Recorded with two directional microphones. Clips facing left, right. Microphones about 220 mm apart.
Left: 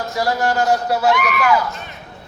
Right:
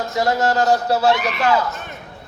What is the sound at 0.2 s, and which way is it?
A man's voice, 25° right (ahead or behind).